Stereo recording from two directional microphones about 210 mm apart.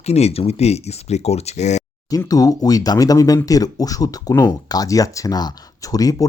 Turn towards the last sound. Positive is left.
turn(degrees=15)  # may be behind; listen again after turning